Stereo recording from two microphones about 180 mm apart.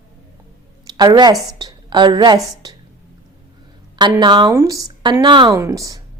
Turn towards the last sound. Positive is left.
turn(degrees=-20)  # may be behind; listen again after turning